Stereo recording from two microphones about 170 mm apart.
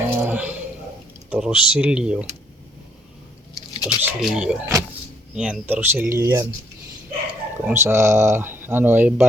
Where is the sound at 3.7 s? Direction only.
25° left (ahead or behind).